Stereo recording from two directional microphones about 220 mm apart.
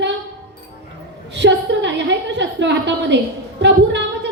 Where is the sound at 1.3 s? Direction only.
55° right (ahead or behind).